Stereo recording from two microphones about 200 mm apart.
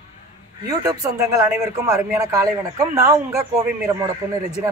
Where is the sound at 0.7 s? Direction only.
15° right (ahead or behind).